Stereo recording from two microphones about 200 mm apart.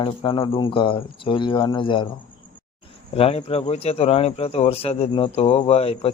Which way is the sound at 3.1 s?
30° left (ahead or behind).